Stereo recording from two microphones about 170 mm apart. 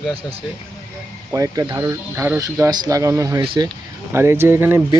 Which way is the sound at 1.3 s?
20° right (ahead or behind).